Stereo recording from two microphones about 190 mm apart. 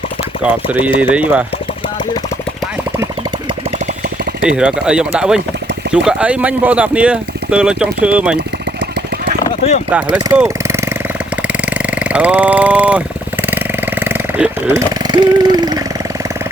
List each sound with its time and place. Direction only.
0.4 s speech: 5° right (ahead or behind)
4.4 s speech: 5° right (ahead or behind)
10.3 s a sound: 10° right (ahead or behind)
12.0 s speech: 5° right (ahead or behind)
14.0 s a sound: 10° right (ahead or behind)
15.1 s speech: 20° right (ahead or behind)